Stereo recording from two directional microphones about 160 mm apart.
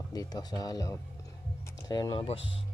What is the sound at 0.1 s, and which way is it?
Speech, 25° left (ahead or behind).